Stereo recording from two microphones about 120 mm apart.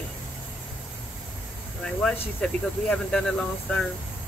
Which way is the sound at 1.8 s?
5° left (ahead or behind).